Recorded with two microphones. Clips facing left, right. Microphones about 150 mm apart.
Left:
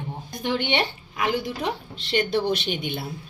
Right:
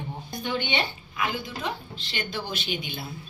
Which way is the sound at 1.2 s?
65° left (ahead or behind).